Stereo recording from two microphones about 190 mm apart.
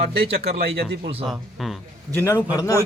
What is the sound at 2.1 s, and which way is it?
Speech, 10° left (ahead or behind).